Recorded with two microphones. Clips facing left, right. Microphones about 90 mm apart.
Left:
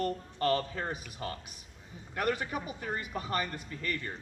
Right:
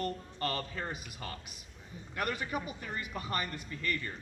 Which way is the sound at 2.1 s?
35° left (ahead or behind).